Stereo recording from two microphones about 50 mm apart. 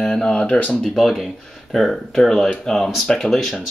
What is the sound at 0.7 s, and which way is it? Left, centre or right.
Speech, centre.